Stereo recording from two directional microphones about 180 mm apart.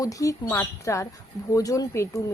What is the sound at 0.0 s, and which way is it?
Speech, 20° left (ahead or behind).